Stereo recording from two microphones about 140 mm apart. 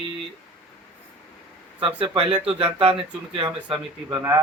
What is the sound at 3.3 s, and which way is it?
Speech, 35° right (ahead or behind).